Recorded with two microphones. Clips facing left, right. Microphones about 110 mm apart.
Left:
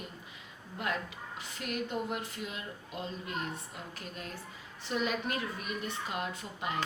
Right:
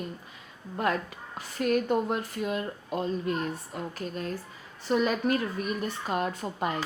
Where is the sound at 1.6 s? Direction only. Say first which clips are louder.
Right 10 dB; 50° right (ahead or behind).